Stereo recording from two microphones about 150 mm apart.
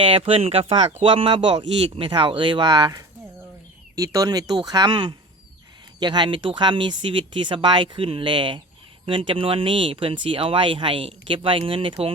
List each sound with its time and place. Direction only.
0.0 s speech: 40° right (ahead or behind)